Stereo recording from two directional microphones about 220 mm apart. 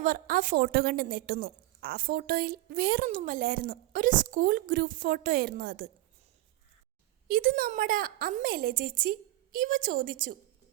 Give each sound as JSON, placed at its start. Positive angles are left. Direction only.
{"t": 0.0, "sound": "a woman's voice", "side_deg": -40}
{"t": 7.3, "sound": "a woman's voice", "side_deg": -40}